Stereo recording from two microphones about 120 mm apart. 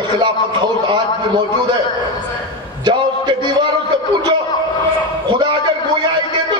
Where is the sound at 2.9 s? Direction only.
40° right (ahead or behind).